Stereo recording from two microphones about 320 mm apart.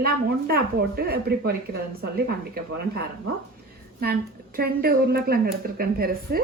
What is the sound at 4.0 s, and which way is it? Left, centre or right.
Speech, right.